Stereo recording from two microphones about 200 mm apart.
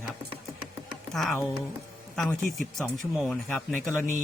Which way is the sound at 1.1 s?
Centre (ahead or behind).